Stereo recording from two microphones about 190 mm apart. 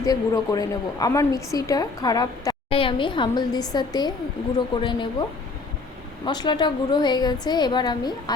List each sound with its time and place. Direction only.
0.0 s a woman's voice: 20° left (ahead or behind)
6.2 s a woman's voice: 25° left (ahead or behind)